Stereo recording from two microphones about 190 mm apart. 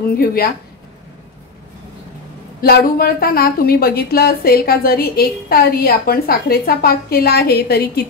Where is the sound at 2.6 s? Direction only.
55° left (ahead or behind).